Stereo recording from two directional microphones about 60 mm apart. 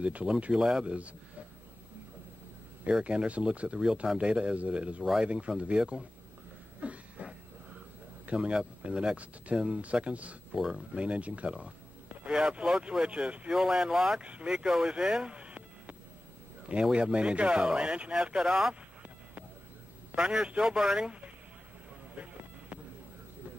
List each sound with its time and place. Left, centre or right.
0.0 s speech: centre
2.9 s speech: centre
6.8 s a sound: right
8.3 s speech: centre
10.5 s speech: centre
20.2 s speech: centre
22.1 s a sound: right